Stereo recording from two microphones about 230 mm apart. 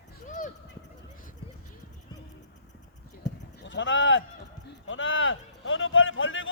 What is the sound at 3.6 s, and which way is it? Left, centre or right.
Speech, left.